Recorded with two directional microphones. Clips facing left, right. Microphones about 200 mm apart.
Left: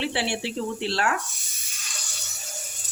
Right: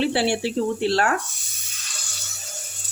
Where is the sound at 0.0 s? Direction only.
40° right (ahead or behind).